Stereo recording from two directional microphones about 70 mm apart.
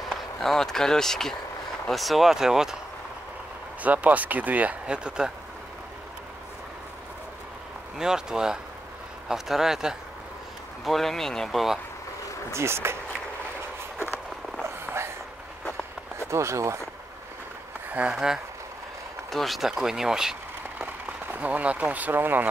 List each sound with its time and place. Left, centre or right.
0.1 s speech: centre
3.8 s speech: right
8.0 s speech: centre
12.5 s speech: right
14.6 s a sound: right
16.3 s speech: right
18.1 s speech: centre
20.8 s speech: right